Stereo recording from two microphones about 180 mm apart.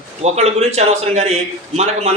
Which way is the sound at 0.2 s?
35° right (ahead or behind).